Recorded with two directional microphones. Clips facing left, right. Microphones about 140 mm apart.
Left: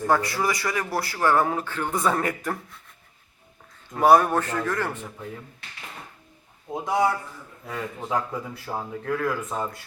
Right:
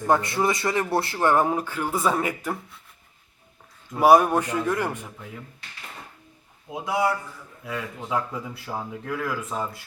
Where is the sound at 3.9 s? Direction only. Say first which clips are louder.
Right 1 dB; 10° right (ahead or behind).